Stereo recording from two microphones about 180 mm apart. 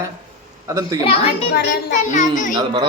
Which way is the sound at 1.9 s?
45° left (ahead or behind).